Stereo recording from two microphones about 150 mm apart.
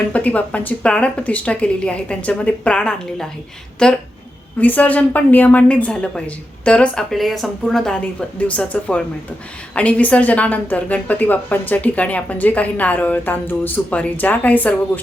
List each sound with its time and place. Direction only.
0.1 s a woman's voice: 10° left (ahead or behind)